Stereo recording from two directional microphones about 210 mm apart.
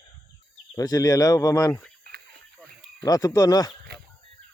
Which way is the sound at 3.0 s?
15° left (ahead or behind).